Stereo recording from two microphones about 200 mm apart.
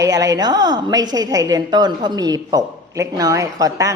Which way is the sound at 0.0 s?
15° right (ahead or behind).